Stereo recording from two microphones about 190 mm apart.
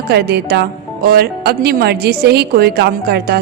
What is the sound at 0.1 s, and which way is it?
A woman's voice, 60° right (ahead or behind).